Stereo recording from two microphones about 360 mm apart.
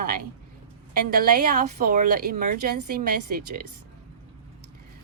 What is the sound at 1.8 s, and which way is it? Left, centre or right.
Speech, right.